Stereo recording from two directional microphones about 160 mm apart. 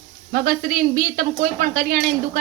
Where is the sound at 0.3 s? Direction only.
60° right (ahead or behind).